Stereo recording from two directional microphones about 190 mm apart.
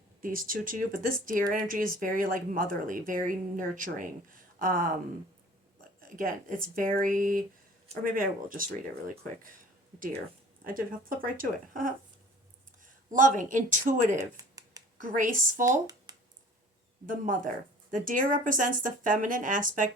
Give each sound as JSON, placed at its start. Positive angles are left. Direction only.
{"t": 0.2, "sound": "speech", "side_deg": -45}
{"t": 6.0, "sound": "speech", "side_deg": -50}
{"t": 10.6, "sound": "speech", "side_deg": -50}
{"t": 14.2, "sound": "a sound", "side_deg": -20}
{"t": 14.9, "sound": "speech", "side_deg": -45}
{"t": 15.6, "sound": "speech", "side_deg": -20}
{"t": 17.1, "sound": "speech", "side_deg": -45}